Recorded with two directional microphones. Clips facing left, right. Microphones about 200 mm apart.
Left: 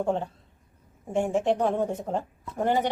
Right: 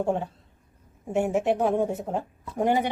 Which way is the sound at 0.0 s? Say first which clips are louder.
Right 1 dB; 10° right (ahead or behind).